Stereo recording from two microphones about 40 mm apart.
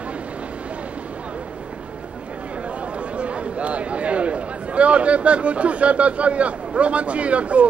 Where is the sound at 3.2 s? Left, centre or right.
Right.